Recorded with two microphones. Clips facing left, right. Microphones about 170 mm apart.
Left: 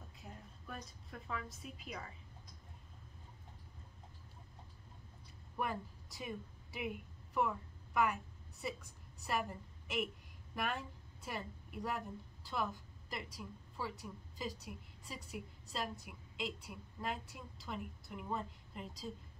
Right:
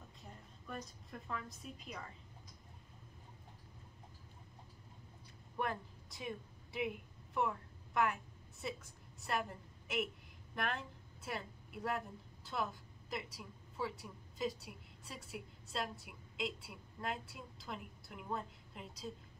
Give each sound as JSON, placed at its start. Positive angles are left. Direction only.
{"t": 0.2, "sound": "a woman's voice", "side_deg": 0}
{"t": 5.6, "sound": "a woman's voice", "side_deg": 0}